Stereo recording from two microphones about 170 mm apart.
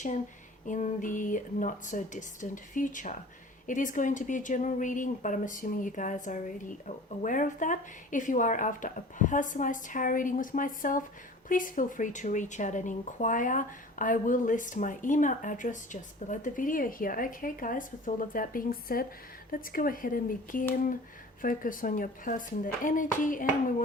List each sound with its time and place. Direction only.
0.6 s speech: 50° left (ahead or behind)